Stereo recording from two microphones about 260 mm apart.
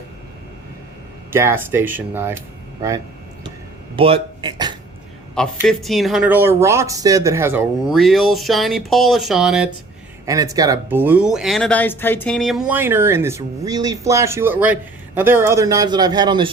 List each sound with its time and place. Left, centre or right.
1.3 s speech: centre
3.9 s speech: right
5.5 s speech: centre
10.2 s speech: centre